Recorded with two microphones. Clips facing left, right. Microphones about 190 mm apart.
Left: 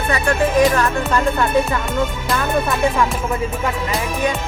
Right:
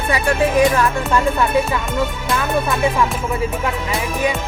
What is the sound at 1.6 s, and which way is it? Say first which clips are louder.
Speech: even; centre (ahead or behind).